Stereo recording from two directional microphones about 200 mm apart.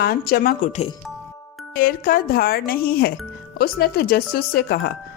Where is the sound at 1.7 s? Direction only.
45° left (ahead or behind).